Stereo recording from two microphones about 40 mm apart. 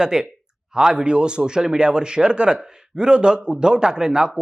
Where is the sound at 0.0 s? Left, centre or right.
Centre.